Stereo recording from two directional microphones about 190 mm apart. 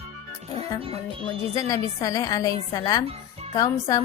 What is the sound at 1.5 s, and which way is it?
A woman's voice, 15° left (ahead or behind).